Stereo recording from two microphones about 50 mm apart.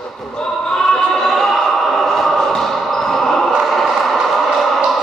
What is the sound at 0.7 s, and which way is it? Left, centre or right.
Choir, centre.